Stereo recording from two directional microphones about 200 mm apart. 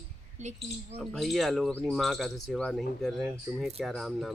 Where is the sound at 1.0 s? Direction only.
Centre (ahead or behind).